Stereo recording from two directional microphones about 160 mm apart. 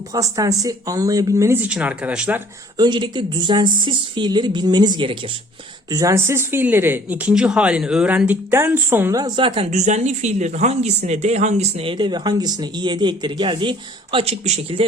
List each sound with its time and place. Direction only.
0.1 s speech: 20° right (ahead or behind)
2.7 s speech: 25° right (ahead or behind)
9.7 s speech: 45° right (ahead or behind)